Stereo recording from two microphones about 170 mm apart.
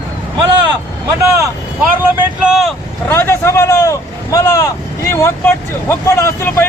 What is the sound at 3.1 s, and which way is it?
Speech, 15° left (ahead or behind).